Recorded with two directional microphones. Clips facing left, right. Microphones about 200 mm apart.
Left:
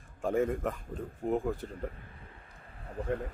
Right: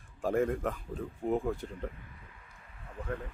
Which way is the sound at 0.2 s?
Centre (ahead or behind).